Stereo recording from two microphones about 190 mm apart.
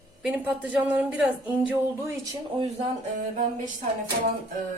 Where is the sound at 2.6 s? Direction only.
30° right (ahead or behind).